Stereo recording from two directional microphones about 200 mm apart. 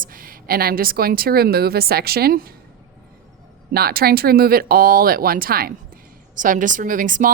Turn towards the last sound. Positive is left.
turn(degrees=-40)  # may be behind; listen again after turning